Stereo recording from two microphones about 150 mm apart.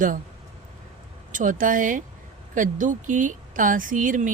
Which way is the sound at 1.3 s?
60° right (ahead or behind).